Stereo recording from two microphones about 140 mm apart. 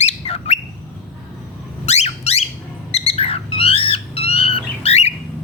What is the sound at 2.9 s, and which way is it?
Cat, 45° left (ahead or behind).